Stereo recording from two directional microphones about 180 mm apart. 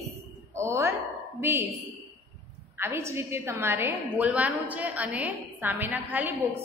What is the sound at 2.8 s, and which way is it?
A woman's voice, 15° right (ahead or behind).